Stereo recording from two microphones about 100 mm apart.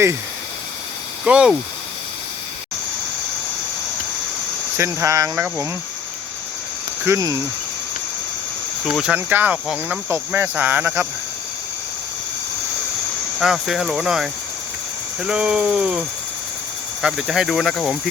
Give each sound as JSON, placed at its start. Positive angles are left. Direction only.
{"t": 1.2, "sound": "speech", "side_deg": -10}
{"t": 4.8, "sound": "speech", "side_deg": -30}
{"t": 7.0, "sound": "speech", "side_deg": -35}
{"t": 8.8, "sound": "speech", "side_deg": -5}
{"t": 9.1, "sound": "speech", "side_deg": -20}
{"t": 13.4, "sound": "speech", "side_deg": -5}
{"t": 17.0, "sound": "speech", "side_deg": -5}